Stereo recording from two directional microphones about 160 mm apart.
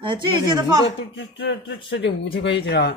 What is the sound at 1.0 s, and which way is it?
A man's voice, 90° left.